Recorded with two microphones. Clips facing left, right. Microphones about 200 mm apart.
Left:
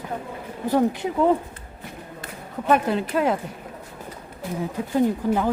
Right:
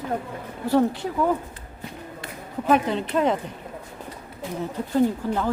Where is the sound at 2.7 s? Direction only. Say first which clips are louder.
Even; 5° left (ahead or behind).